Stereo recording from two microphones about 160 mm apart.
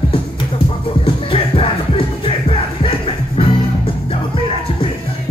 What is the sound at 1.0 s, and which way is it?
Music, 35° left (ahead or behind).